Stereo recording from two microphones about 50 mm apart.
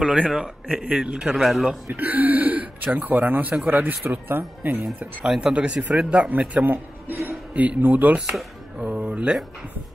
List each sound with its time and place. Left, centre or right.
0.0 s a man's voice: right
1.3 s a man's voice: centre
1.9 s speech: right
5.2 s a man's voice: centre
5.5 s speech: right